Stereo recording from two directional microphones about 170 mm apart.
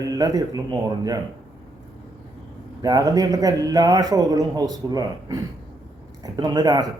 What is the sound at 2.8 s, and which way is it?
Speech, 20° right (ahead or behind).